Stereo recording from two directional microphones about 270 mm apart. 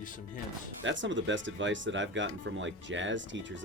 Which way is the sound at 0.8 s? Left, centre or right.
Right.